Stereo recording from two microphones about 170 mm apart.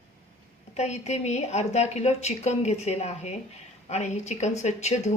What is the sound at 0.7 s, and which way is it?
A woman's voice, 40° left (ahead or behind).